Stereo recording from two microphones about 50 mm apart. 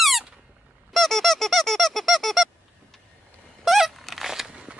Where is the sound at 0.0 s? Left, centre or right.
Centre.